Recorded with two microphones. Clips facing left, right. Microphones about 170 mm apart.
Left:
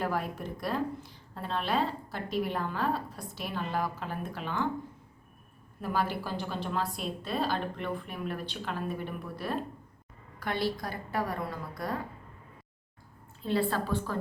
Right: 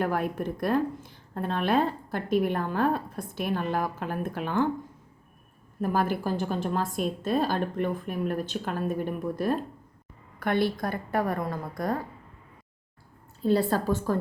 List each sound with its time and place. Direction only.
0.0 s a woman's voice: 55° right (ahead or behind)
5.8 s a woman's voice: 45° right (ahead or behind)
13.4 s a woman's voice: 40° right (ahead or behind)